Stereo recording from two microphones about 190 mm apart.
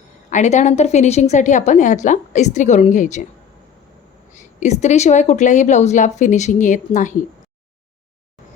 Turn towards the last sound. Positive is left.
turn(degrees=40)  # may be behind; listen again after turning